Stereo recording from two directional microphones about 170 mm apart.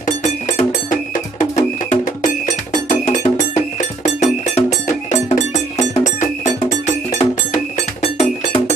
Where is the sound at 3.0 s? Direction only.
45° left (ahead or behind).